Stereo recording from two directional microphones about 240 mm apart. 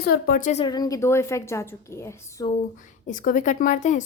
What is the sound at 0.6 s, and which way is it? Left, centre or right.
A woman's voice, centre.